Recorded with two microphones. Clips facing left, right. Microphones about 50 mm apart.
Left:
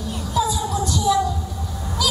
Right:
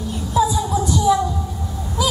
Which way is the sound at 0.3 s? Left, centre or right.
Centre.